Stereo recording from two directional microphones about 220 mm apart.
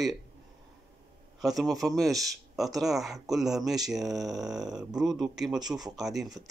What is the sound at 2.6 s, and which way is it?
Speech, centre (ahead or behind).